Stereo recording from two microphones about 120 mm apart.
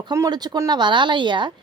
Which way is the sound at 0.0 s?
35° right (ahead or behind).